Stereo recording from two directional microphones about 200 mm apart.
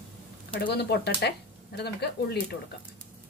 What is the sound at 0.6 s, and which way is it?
Speech, 55° left (ahead or behind).